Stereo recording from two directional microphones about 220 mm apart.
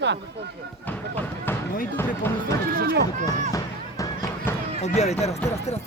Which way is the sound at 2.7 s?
50° right (ahead or behind).